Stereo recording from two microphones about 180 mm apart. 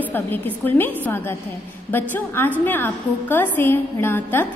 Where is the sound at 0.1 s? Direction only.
10° left (ahead or behind).